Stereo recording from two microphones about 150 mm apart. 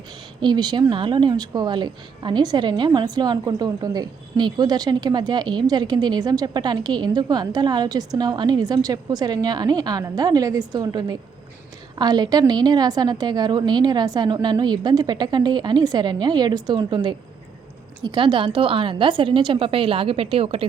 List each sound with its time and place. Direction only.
0.4 s a woman's voice: 30° right (ahead or behind)